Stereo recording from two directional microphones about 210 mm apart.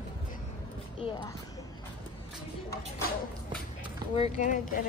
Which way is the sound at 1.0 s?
25° left (ahead or behind).